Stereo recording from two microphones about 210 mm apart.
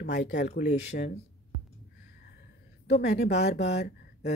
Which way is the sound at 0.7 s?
35° left (ahead or behind).